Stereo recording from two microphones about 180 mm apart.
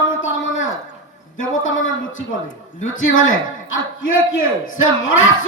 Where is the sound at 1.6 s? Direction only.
90° left.